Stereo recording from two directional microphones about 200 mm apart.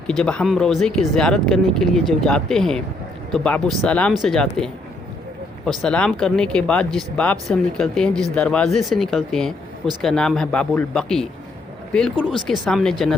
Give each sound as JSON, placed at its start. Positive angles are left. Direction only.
{"t": 0.1, "sound": "speech", "side_deg": 5}
{"t": 12.1, "sound": "speech", "side_deg": 25}
{"t": 12.5, "sound": "speech", "side_deg": 0}